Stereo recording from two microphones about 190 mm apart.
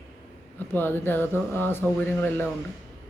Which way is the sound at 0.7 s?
10° left (ahead or behind).